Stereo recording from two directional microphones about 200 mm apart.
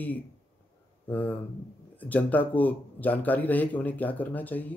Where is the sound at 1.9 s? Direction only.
10° left (ahead or behind).